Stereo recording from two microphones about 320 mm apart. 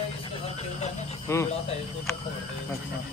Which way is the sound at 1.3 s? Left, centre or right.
Centre.